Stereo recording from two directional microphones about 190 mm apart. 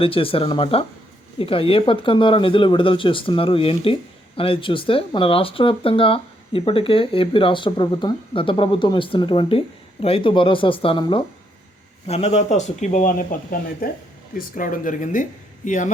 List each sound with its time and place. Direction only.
0.0 s speech: 30° left (ahead or behind)